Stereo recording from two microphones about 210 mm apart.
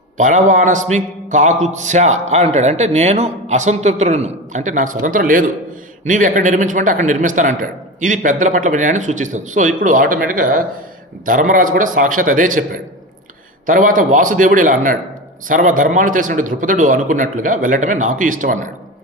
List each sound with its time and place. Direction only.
0.2 s a man's voice: 35° right (ahead or behind)